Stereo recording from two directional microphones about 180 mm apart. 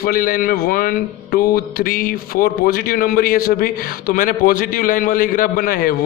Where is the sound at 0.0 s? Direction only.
50° left (ahead or behind).